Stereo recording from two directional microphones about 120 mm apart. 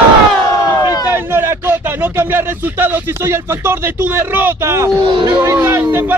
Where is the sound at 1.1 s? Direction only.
20° right (ahead or behind).